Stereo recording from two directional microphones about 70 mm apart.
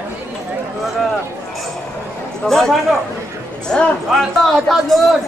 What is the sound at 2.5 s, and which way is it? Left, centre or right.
A man's voice, centre.